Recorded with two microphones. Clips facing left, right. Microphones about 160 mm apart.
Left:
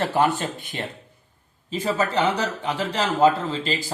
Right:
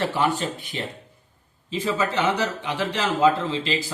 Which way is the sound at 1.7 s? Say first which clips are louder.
Left 1 dB; 45° left (ahead or behind).